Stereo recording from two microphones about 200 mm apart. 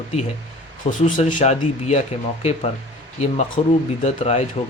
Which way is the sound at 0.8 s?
40° left (ahead or behind).